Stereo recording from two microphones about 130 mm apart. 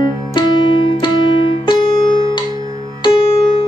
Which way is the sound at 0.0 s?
35° left (ahead or behind).